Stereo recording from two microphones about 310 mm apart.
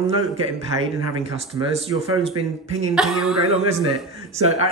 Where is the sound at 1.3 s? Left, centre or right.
Centre.